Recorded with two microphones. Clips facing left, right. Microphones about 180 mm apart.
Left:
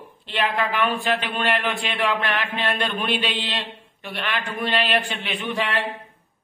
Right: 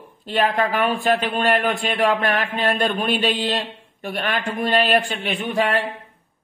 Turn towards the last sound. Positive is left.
turn(degrees=-45)  # may be behind; listen again after turning